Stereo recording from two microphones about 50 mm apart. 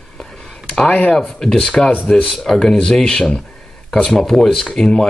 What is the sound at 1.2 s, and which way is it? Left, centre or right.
Speech, centre.